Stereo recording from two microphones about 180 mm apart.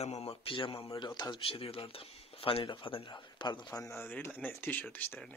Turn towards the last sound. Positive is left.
turn(degrees=5)  # may be behind; listen again after turning